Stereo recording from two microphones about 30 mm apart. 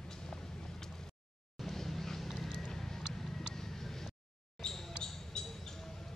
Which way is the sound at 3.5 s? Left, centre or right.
Centre.